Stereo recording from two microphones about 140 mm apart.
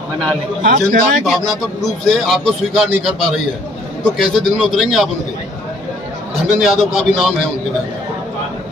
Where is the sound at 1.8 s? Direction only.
Centre (ahead or behind).